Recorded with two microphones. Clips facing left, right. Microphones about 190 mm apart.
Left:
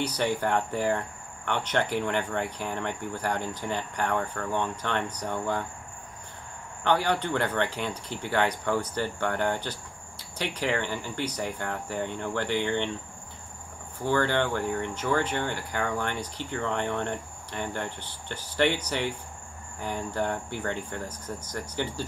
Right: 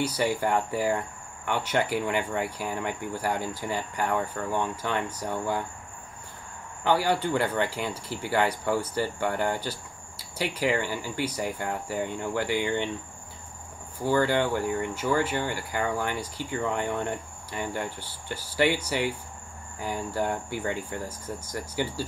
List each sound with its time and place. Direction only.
0.0 s speech: 5° right (ahead or behind)
6.8 s speech: 5° right (ahead or behind)
14.0 s speech: 10° right (ahead or behind)